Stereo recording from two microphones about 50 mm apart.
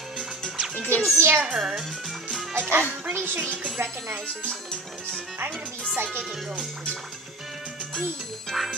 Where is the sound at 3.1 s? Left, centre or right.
Right.